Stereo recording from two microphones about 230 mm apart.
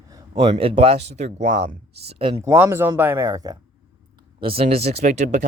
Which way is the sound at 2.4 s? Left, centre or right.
Centre.